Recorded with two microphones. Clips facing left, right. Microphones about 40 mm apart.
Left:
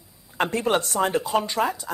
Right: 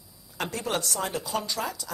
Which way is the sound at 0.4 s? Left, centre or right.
Left.